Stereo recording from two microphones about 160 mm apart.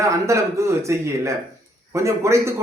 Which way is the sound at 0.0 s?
20° right (ahead or behind).